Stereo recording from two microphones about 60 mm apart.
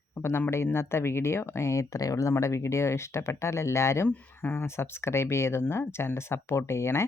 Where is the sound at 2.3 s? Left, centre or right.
Left.